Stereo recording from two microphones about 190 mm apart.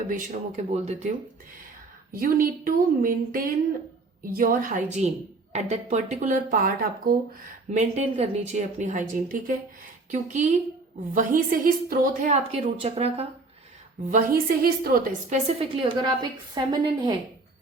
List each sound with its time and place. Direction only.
0.1 s speech: 45° right (ahead or behind)
2.1 s a woman's voice: 50° right (ahead or behind); by 13.2 s 30° right (ahead or behind)
14.1 s a woman's voice: 45° right (ahead or behind)
15.4 s a woman's voice: 30° right (ahead or behind)